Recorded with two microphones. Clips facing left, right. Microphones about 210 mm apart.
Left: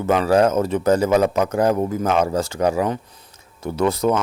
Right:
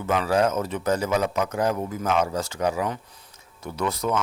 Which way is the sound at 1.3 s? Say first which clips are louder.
Left 6 dB; 55° left (ahead or behind).